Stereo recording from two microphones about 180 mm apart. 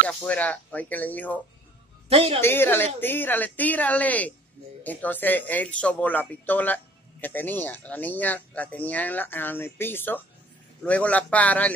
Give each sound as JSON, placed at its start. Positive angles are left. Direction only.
{"t": 0.2, "sound": "speech", "side_deg": 10}
{"t": 2.0, "sound": "a woman's voice", "side_deg": -30}
{"t": 2.4, "sound": "speech", "side_deg": 10}